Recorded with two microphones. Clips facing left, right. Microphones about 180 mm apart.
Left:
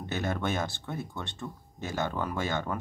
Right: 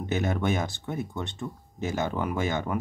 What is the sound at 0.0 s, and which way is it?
Speech, 20° right (ahead or behind).